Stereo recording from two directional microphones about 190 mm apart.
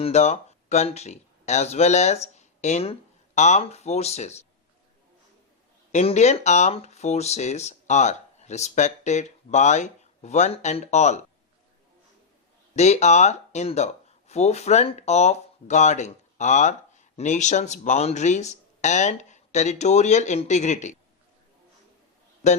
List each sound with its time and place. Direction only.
0.0 s speech: 35° left (ahead or behind)
5.9 s speech: 35° left (ahead or behind)
12.7 s speech: 35° left (ahead or behind)
22.4 s speech: 35° left (ahead or behind)